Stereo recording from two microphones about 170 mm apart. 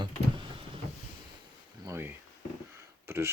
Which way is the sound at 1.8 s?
15° right (ahead or behind).